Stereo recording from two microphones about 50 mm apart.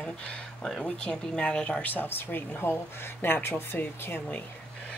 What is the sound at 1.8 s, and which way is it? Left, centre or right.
A woman's voice, left.